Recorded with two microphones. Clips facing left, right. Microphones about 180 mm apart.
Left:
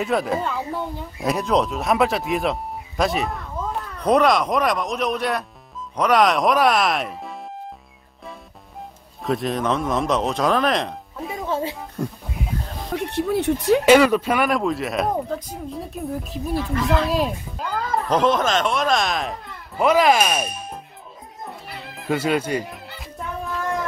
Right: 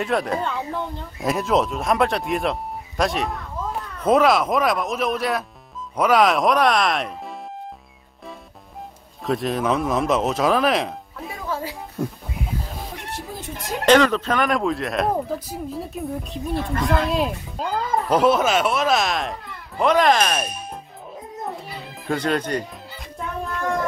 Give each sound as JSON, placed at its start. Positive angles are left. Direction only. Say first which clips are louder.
{"t": 0.0, "sound": "speech", "louder": "left 1 dB", "side_deg": 0}
{"t": 9.2, "sound": "speech", "louder": "even", "side_deg": 0}
{"t": 11.3, "sound": "music", "louder": "left 4 dB", "side_deg": 25}
{"t": 12.0, "sound": "speech", "louder": "right 1 dB", "side_deg": -5}
{"t": 12.9, "sound": "a sound", "louder": "left 11 dB", "side_deg": 65}
{"t": 13.8, "sound": "speech", "louder": "even", "side_deg": 10}
{"t": 21.9, "sound": "speech", "louder": "left 1 dB", "side_deg": 5}
{"t": 22.9, "sound": "music", "louder": "right 2 dB", "side_deg": 0}